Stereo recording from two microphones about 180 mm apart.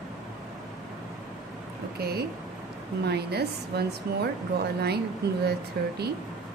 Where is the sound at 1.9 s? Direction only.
60° right (ahead or behind).